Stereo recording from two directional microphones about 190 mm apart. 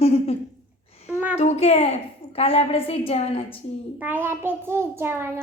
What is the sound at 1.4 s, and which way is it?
A woman's voice, 35° left (ahead or behind).